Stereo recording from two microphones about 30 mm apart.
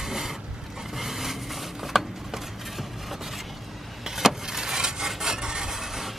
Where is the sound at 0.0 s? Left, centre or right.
Centre.